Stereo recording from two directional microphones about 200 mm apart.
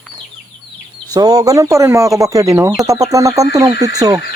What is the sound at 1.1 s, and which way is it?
Speech, 20° right (ahead or behind).